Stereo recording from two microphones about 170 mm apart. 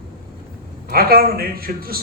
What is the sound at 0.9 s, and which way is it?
A man's voice, 60° right (ahead or behind).